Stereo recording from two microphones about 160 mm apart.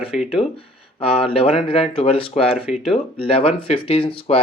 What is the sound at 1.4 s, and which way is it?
Speech, 35° left (ahead or behind).